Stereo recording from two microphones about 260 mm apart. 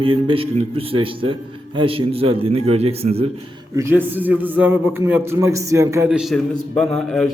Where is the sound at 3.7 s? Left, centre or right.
Centre.